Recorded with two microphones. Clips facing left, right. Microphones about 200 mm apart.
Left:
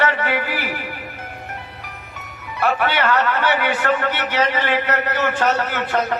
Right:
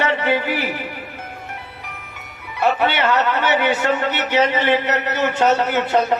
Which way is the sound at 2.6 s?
25° right (ahead or behind).